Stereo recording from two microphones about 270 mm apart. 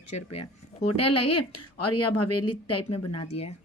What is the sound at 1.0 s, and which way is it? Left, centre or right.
A woman's voice, left.